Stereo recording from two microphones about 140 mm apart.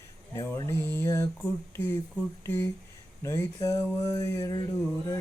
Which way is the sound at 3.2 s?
20° left (ahead or behind).